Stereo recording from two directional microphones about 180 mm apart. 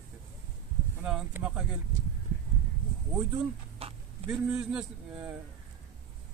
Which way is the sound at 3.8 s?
30° right (ahead or behind).